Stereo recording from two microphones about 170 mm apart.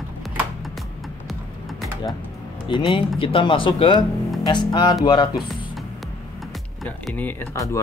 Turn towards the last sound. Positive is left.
turn(degrees=15)  # may be behind; listen again after turning